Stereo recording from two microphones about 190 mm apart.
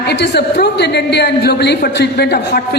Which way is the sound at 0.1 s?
60° left (ahead or behind).